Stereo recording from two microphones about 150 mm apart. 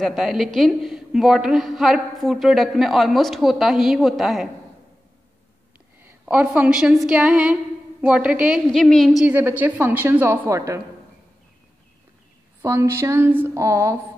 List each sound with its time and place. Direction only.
0.0 s a woman's voice: centre (ahead or behind)
6.0 s a woman's voice: 10° right (ahead or behind)
12.6 s speech: 20° right (ahead or behind)